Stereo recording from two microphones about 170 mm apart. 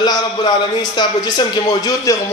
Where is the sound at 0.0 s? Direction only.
25° left (ahead or behind).